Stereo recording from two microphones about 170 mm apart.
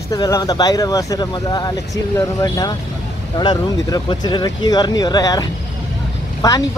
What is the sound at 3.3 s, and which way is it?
Speech, 25° left (ahead or behind).